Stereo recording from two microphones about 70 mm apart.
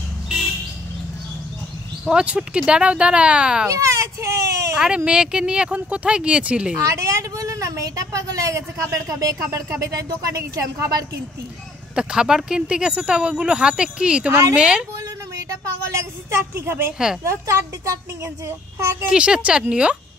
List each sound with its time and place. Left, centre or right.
2.0 s speech: centre
3.6 s speech: right
4.7 s speech: centre
6.9 s a woman's voice: right
11.9 s speech: centre
15.8 s a woman's voice: right
19.0 s speech: centre